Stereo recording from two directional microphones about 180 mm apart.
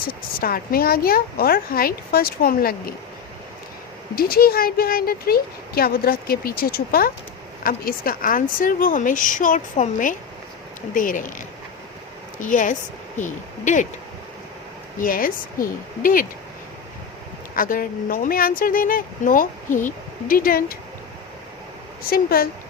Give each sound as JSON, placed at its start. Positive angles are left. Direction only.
{"t": 0.1, "sound": "speech", "side_deg": 55}
{"t": 4.1, "sound": "speech", "side_deg": 55}
{"t": 12.4, "sound": "speech", "side_deg": 45}
{"t": 15.0, "sound": "speech", "side_deg": 50}
{"t": 17.5, "sound": "speech", "side_deg": 50}
{"t": 22.1, "sound": "speech", "side_deg": 55}